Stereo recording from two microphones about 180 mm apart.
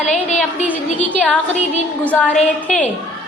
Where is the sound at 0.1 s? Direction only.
40° left (ahead or behind).